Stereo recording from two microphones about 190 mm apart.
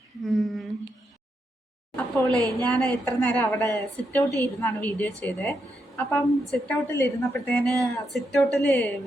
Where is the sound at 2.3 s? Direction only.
20° right (ahead or behind).